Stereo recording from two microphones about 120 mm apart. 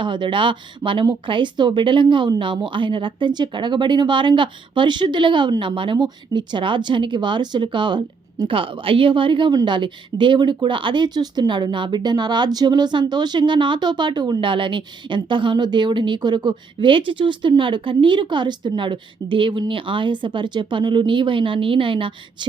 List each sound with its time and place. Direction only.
0.0 s speech: 40° right (ahead or behind)